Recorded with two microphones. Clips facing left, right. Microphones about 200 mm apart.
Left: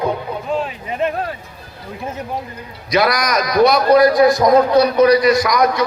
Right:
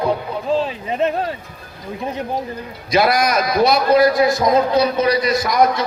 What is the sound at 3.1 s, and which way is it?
A man's voice, 25° right (ahead or behind).